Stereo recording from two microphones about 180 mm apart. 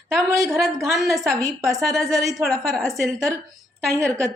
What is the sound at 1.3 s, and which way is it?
Speech, 15° right (ahead or behind).